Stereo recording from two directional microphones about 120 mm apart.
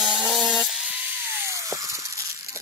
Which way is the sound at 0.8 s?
10° right (ahead or behind).